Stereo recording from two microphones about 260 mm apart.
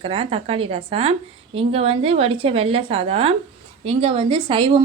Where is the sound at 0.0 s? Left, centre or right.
Right.